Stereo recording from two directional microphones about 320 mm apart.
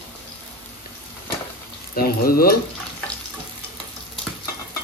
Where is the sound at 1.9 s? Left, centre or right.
Left.